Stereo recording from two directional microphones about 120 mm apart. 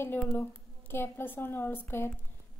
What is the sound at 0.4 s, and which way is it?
A woman's voice, 15° left (ahead or behind).